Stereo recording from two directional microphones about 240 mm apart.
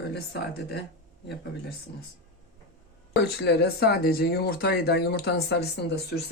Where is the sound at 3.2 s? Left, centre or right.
Left.